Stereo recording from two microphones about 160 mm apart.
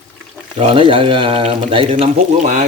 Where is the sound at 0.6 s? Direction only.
35° right (ahead or behind).